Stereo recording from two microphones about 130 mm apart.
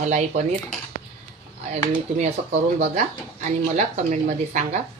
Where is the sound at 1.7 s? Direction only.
60° right (ahead or behind).